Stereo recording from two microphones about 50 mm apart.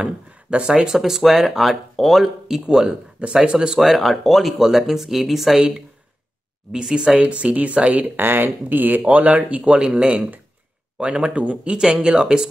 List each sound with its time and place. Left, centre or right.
0.0 s speech: right
0.9 s speech: centre
3.2 s speech: right
3.5 s speech: centre
6.7 s speech: centre
8.2 s speech: right
9.8 s speech: centre